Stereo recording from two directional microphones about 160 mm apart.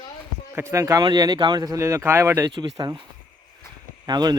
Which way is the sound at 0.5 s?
20° right (ahead or behind).